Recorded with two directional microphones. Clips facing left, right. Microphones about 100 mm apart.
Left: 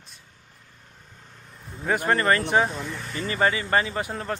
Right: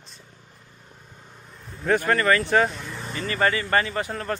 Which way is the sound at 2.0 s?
30° left (ahead or behind).